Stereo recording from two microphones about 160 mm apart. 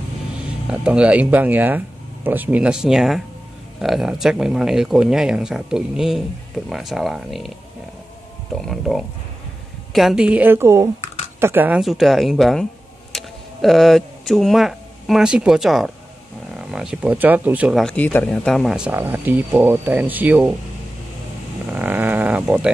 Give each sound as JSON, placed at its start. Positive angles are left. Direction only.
{"t": 0.7, "sound": "speech", "side_deg": -5}
{"t": 8.5, "sound": "speech", "side_deg": 0}
{"t": 11.8, "sound": "speech", "side_deg": 0}
{"t": 17.7, "sound": "speech", "side_deg": 10}
{"t": 21.7, "sound": "a sound", "side_deg": -10}